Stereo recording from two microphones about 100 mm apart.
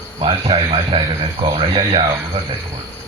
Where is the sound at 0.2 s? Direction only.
60° right (ahead or behind).